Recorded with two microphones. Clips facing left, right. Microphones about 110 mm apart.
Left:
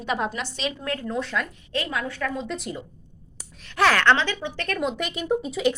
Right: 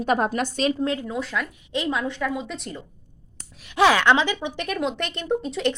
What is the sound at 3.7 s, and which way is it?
Speech, 15° right (ahead or behind).